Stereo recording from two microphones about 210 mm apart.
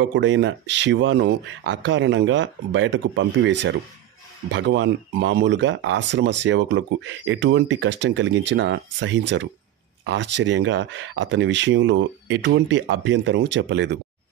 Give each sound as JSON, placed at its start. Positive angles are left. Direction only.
{"t": 0.0, "sound": "speech", "side_deg": -60}